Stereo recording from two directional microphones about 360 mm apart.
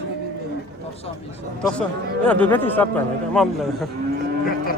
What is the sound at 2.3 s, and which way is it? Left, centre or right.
A man's voice, centre.